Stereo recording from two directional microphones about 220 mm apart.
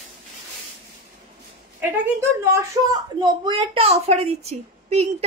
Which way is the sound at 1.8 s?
10° right (ahead or behind).